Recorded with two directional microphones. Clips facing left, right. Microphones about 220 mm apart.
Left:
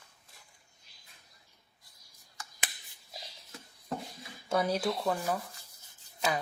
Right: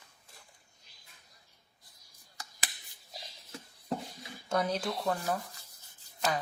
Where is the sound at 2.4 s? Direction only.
35° right (ahead or behind).